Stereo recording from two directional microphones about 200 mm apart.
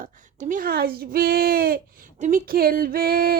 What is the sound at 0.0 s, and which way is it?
Speech, 40° right (ahead or behind).